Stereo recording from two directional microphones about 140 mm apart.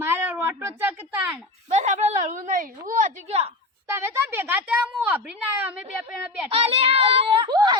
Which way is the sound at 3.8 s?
20° right (ahead or behind).